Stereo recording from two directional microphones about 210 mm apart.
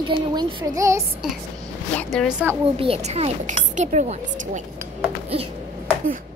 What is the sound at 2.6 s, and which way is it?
A child's voice, 25° right (ahead or behind).